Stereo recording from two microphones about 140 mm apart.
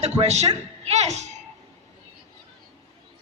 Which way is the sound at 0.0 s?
50° right (ahead or behind).